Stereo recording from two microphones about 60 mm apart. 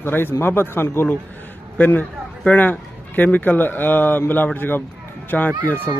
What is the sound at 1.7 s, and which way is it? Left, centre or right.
A man's voice, left.